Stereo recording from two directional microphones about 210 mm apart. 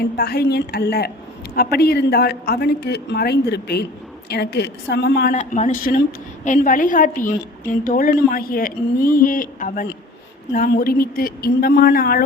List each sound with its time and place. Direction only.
0.0 s a woman's voice: 50° left (ahead or behind)
5.3 s a woman's voice: 35° left (ahead or behind)